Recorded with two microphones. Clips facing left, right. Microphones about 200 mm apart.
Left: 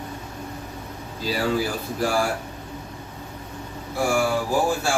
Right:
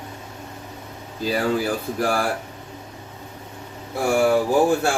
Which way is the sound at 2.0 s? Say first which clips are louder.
Left 1 dB; 55° right (ahead or behind).